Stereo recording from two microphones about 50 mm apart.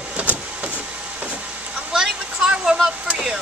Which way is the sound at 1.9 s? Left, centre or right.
Centre.